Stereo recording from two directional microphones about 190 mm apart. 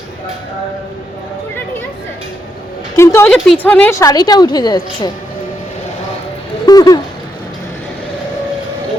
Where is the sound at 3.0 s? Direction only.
15° left (ahead or behind).